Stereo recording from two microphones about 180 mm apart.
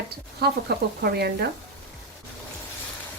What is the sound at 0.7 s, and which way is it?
Speech, 60° right (ahead or behind).